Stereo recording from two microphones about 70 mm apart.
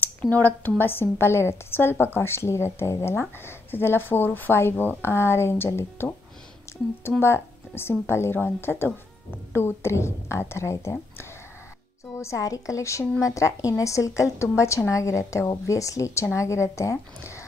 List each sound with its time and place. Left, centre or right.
0.0 s a woman's voice: left
7.1 s a woman's voice: left